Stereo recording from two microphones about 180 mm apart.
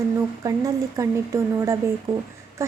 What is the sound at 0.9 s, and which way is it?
Speech, 15° right (ahead or behind).